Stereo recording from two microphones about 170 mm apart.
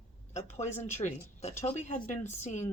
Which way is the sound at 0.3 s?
40° left (ahead or behind).